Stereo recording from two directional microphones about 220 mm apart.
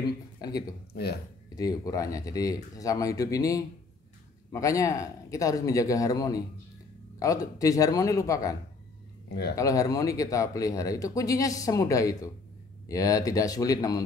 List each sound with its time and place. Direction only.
0.0 s speech: 15° left (ahead or behind)
9.3 s speech: 45° left (ahead or behind)
9.6 s speech: 15° left (ahead or behind)